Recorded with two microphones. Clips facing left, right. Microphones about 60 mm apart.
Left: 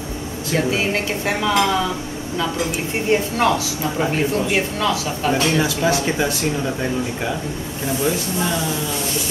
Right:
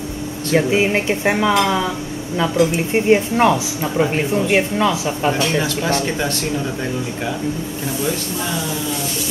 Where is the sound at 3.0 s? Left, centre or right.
Right.